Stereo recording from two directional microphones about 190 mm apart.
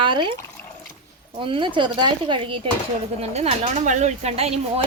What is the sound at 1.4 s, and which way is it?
Speech, 25° right (ahead or behind).